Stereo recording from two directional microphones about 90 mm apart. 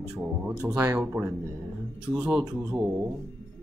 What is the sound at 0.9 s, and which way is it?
Speech, 15° right (ahead or behind).